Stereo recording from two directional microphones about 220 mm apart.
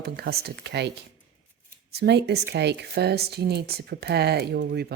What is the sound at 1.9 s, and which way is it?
Speech, 50° right (ahead or behind).